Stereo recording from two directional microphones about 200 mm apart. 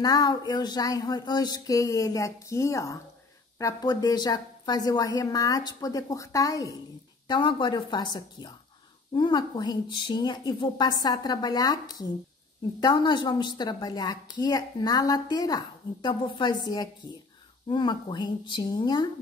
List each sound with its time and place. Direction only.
0.0 s a woman's voice: 20° left (ahead or behind)